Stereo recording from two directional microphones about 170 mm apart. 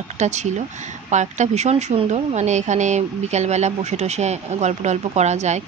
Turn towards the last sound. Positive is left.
turn(degrees=-40)  # may be behind; listen again after turning